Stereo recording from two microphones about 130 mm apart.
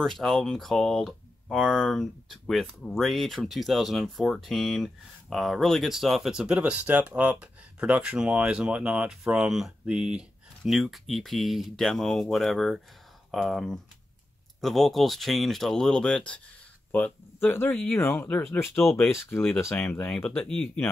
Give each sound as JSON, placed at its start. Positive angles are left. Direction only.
{"t": 0.0, "sound": "speech", "side_deg": 5}